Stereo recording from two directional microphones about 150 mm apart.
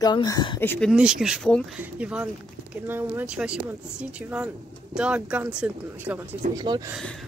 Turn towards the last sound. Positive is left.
turn(degrees=-30)  # may be behind; listen again after turning